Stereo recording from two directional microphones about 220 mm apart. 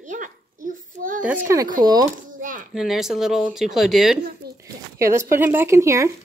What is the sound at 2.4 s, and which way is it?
Speech, 35° right (ahead or behind).